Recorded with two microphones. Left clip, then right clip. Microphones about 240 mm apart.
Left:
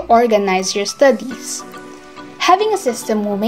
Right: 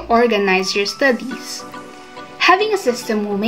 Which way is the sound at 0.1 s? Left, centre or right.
Left.